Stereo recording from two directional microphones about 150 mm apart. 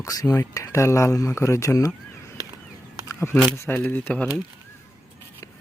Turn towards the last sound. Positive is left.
turn(degrees=10)  # may be behind; listen again after turning